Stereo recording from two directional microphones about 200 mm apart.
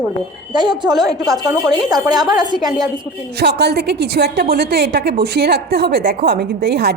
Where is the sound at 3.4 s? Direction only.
55° right (ahead or behind).